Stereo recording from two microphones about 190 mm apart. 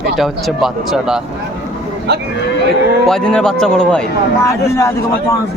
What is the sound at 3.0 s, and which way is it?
Speech, 5° left (ahead or behind).